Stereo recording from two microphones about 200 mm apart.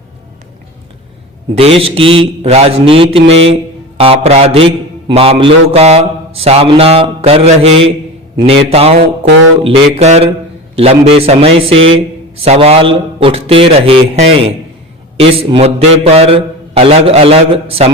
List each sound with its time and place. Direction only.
1.5 s a man's voice: 30° right (ahead or behind)
9.6 s a sound: 30° right (ahead or behind)
10.8 s a man's voice: 30° right (ahead or behind)